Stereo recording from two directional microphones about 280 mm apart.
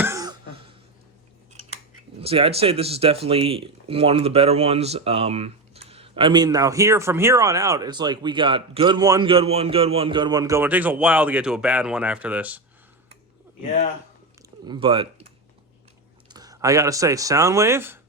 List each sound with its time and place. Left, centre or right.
0.0 s a sound: centre
2.2 s speech: right; by 12.6 s centre
14.6 s speech: centre
16.3 s speech: centre